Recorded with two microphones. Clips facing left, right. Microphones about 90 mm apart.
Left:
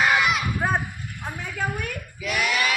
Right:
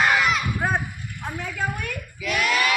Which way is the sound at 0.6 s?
5° left (ahead or behind).